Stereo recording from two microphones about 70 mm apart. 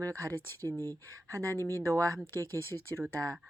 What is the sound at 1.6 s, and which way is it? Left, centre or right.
Speech, left.